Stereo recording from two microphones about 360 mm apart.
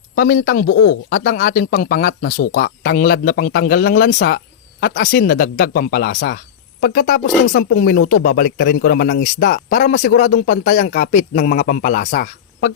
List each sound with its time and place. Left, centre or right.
0.2 s speech: left
0.7 s speech: left
1.1 s speech: left
8.0 s speech: left
8.4 s speech: left